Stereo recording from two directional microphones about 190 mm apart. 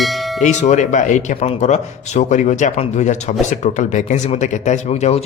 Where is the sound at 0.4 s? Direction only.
40° left (ahead or behind).